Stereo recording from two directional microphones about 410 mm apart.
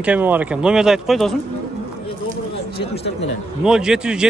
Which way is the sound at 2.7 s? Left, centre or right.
Centre.